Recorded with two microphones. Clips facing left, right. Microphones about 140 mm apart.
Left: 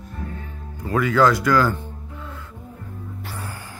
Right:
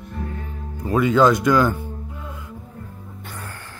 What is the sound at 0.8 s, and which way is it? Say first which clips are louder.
Speech: right 2 dB; 20° right (ahead or behind).